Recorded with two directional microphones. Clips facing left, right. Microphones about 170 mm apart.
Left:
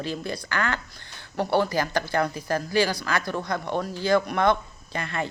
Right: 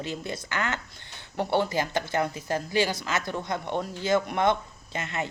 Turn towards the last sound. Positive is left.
turn(degrees=-20)  # may be behind; listen again after turning